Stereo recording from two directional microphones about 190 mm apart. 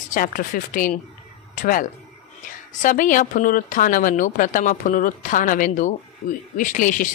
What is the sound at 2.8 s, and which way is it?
Speech, 45° left (ahead or behind).